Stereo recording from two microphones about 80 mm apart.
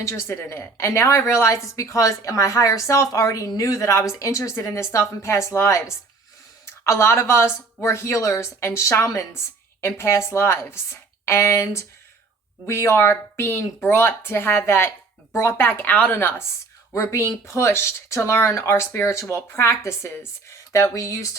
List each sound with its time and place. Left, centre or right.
0.0 s a woman's voice: left
16.9 s a woman's voice: left